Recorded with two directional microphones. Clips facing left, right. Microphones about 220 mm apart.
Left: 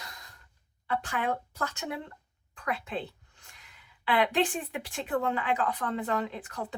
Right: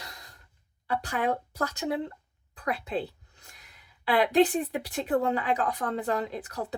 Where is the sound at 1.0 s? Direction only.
35° right (ahead or behind).